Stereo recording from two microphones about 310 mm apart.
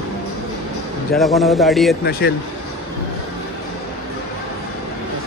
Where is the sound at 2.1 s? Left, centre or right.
Left.